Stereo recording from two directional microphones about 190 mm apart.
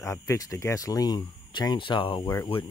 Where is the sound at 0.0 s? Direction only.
15° left (ahead or behind).